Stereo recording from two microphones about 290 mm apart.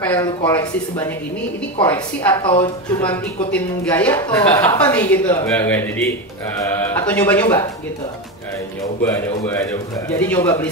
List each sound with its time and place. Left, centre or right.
0.0 s speech: centre
3.5 s a man's voice: centre
9.0 s a man's voice: centre